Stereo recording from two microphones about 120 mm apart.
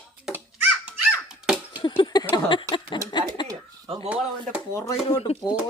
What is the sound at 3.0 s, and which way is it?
Speech, 40° left (ahead or behind).